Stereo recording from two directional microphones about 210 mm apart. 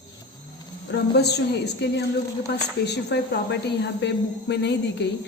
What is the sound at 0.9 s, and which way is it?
A woman's voice, 50° left (ahead or behind).